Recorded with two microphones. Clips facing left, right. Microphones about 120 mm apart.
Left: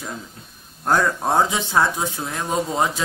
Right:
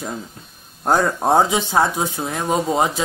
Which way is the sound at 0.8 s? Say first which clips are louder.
Right 2 dB; 25° right (ahead or behind).